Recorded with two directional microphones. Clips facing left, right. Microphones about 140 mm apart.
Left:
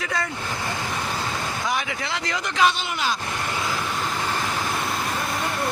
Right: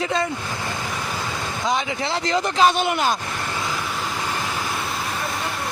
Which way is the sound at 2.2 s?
25° right (ahead or behind).